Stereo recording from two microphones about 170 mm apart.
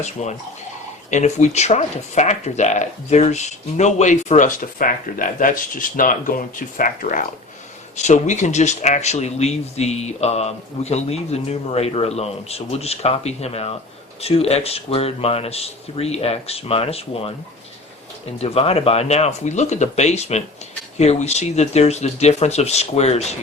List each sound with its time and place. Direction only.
0.0 s speech: 40° left (ahead or behind)
18.3 s speech: 35° left (ahead or behind)